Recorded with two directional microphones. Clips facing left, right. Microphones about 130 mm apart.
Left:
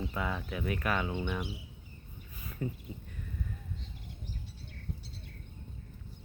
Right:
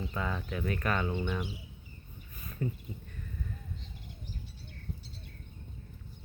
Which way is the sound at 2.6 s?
10° left (ahead or behind).